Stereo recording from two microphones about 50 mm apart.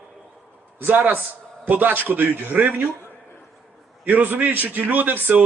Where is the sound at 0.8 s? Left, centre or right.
Right.